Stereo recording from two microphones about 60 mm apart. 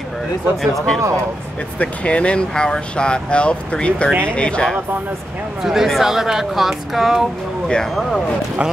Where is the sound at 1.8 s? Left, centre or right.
Left.